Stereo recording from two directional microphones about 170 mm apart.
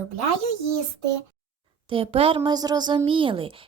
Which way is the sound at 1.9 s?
35° right (ahead or behind).